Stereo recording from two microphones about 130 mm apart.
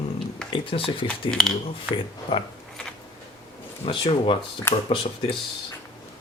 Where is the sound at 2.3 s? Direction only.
40° left (ahead or behind).